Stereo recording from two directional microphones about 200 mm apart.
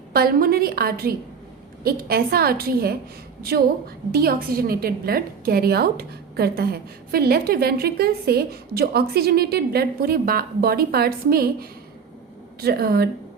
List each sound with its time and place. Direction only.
0.1 s a woman's voice: 50° right (ahead or behind)
4.1 s a woman's voice: 50° right (ahead or behind)